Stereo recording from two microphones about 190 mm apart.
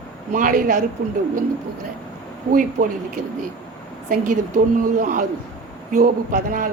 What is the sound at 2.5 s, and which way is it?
Speech, 45° right (ahead or behind).